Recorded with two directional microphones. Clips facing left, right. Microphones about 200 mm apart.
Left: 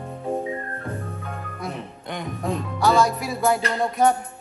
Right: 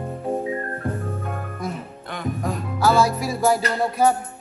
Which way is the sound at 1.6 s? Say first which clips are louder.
Right 2 dB; centre (ahead or behind).